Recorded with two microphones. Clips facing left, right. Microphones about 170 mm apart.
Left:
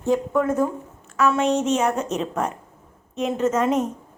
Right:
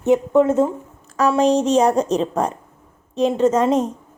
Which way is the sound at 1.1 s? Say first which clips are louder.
Right 4 dB; 35° right (ahead or behind).